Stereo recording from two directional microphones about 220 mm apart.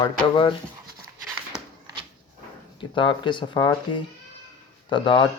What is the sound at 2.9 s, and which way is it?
Speech, 20° left (ahead or behind).